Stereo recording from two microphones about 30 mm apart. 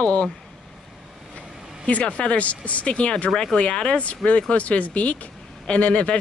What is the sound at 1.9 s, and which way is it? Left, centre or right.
Speech, left.